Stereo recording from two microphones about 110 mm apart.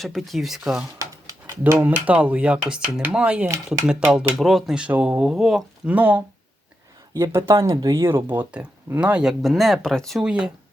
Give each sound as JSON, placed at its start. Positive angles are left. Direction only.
{"t": 0.0, "sound": "speech", "side_deg": 0}
{"t": 0.9, "sound": "a sound", "side_deg": -30}
{"t": 1.6, "sound": "speech", "side_deg": -15}
{"t": 4.4, "sound": "speech", "side_deg": 0}
{"t": 5.8, "sound": "speech", "side_deg": -15}
{"t": 7.1, "sound": "speech", "side_deg": -25}
{"t": 10.2, "sound": "speech", "side_deg": -10}